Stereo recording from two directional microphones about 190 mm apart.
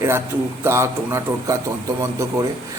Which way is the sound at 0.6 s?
15° right (ahead or behind).